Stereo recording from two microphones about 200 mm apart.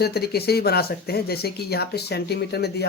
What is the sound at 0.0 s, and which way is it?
Speech, 50° left (ahead or behind).